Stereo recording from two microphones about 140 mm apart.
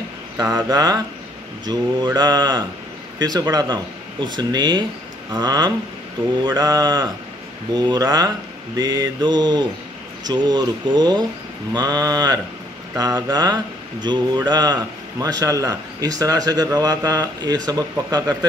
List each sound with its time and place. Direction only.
0.4 s a man's voice: 20° right (ahead or behind)